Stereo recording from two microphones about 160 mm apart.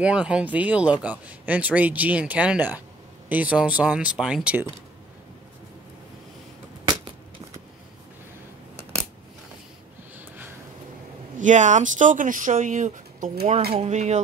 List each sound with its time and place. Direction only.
0.0 s speech: 5° right (ahead or behind)
10.1 s a sound: 10° right (ahead or behind)
11.3 s speech: 50° right (ahead or behind)